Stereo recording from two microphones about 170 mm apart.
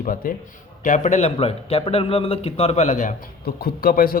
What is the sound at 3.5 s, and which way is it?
Speech, 60° left (ahead or behind).